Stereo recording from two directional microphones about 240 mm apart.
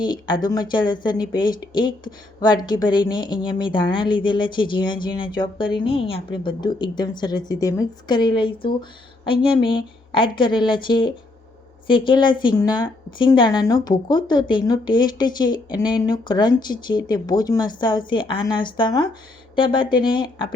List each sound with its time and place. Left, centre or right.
0.0 s a woman's voice: centre